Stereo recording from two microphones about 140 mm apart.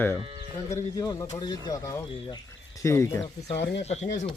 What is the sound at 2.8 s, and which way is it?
Speech, 20° left (ahead or behind).